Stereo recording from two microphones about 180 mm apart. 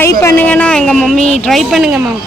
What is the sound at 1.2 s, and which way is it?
Speech, 35° left (ahead or behind).